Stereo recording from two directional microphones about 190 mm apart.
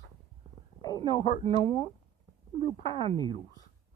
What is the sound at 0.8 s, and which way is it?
Speech, 20° left (ahead or behind).